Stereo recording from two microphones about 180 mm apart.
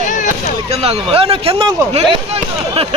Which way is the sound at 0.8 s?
35° right (ahead or behind).